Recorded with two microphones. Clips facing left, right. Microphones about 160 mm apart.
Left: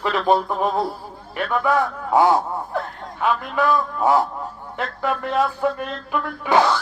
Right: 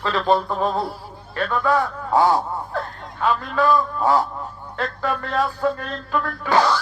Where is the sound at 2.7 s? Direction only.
20° left (ahead or behind).